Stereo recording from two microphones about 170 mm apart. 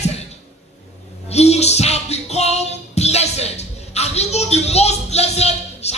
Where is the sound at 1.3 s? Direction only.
40° left (ahead or behind).